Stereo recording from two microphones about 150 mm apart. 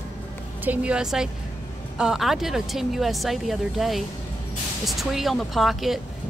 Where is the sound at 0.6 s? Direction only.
10° right (ahead or behind).